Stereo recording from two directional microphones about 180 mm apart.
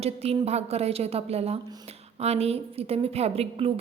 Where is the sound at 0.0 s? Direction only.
35° right (ahead or behind).